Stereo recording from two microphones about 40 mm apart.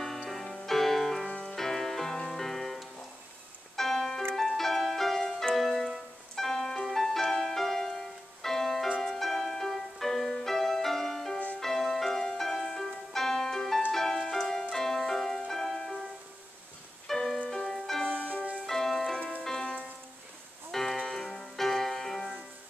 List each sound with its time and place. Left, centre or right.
0.0 s music: centre
17.1 s music: centre
18.0 s music: left
18.7 s music: centre
19.6 s music: left
20.7 s music: centre
21.0 s keyboard: centre
21.3 s music: centre